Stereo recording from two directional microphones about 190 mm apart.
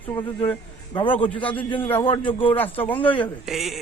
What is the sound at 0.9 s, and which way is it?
A man's voice, 25° left (ahead or behind).